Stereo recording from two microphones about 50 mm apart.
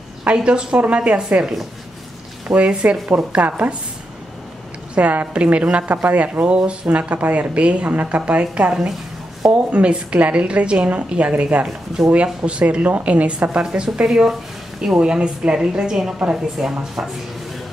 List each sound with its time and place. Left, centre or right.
0.3 s a woman's voice: centre
2.5 s a woman's voice: right
4.9 s a woman's voice: right; by 17.1 s centre